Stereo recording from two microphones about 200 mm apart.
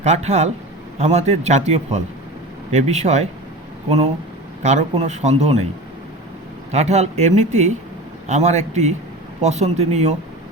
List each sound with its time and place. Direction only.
0.0 s a man's voice: 35° right (ahead or behind)
6.7 s a man's voice: 35° right (ahead or behind)